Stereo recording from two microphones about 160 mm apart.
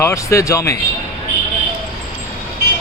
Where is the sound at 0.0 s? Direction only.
15° left (ahead or behind).